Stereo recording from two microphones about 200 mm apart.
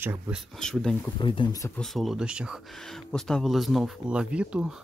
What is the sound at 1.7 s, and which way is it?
Speech, centre (ahead or behind).